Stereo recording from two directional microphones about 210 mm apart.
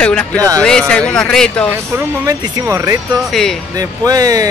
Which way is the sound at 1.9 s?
15° right (ahead or behind).